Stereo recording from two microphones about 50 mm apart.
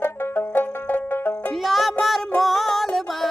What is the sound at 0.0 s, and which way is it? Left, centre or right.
Music, left.